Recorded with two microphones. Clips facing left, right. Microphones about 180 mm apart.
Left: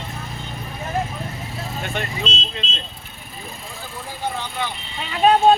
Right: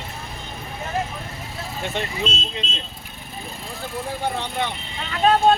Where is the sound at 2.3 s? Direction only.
55° right (ahead or behind).